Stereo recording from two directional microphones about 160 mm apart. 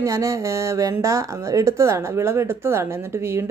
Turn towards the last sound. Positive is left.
turn(degrees=-15)  # may be behind; listen again after turning